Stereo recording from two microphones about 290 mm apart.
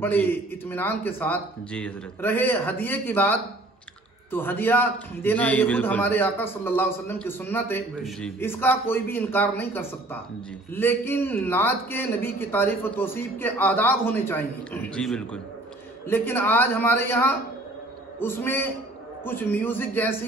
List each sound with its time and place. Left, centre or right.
0.0 s a man's voice: centre